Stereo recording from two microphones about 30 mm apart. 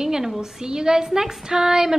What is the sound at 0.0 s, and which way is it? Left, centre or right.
A woman's voice, centre.